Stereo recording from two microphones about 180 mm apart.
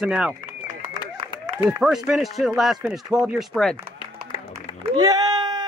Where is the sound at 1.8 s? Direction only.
Centre (ahead or behind).